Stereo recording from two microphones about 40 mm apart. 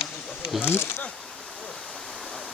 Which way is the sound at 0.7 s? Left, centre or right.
Left.